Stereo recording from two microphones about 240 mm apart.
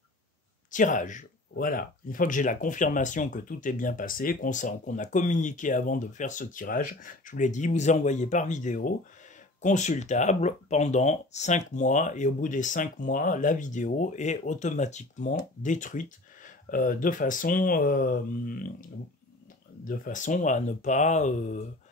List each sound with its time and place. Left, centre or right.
0.7 s speech: left